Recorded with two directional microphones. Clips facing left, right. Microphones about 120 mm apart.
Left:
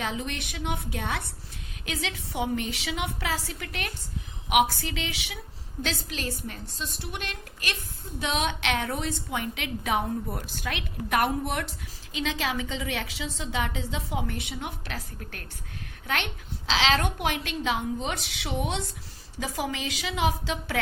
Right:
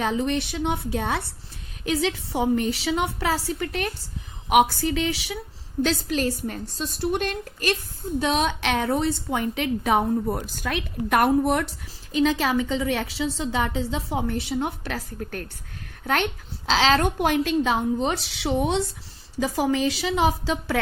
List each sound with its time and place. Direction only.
0.0 s a woman's voice: 40° right (ahead or behind)
16.6 s a woman's voice: 40° right (ahead or behind)